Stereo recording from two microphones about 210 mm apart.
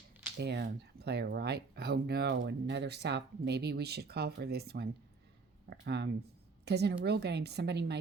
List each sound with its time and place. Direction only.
0.3 s speech: 50° right (ahead or behind)